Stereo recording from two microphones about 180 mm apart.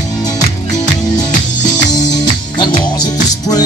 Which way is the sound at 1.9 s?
20° left (ahead or behind).